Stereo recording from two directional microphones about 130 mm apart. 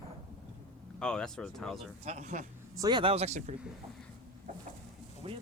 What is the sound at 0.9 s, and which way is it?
Speech, 5° left (ahead or behind).